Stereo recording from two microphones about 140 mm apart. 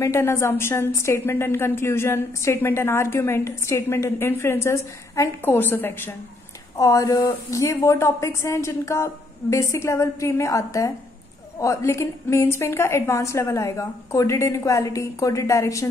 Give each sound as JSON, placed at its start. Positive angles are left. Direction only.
{"t": 0.0, "sound": "a woman's voice", "side_deg": 20}